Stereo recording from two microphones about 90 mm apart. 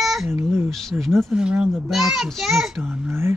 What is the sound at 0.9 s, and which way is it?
A child's voice, 10° right (ahead or behind).